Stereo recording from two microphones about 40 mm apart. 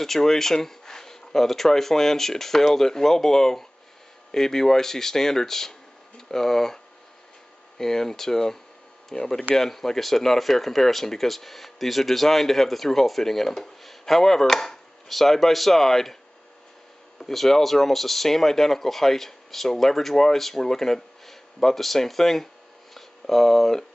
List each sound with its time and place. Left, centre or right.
0.0 s speech: centre
17.2 s speech: centre